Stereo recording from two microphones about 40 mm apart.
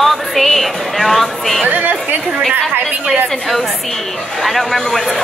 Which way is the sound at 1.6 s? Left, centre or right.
Right.